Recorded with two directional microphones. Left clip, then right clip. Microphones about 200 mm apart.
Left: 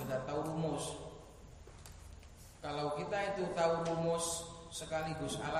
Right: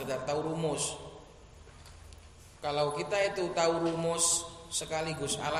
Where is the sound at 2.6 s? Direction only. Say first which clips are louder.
Right 7 dB; 45° right (ahead or behind).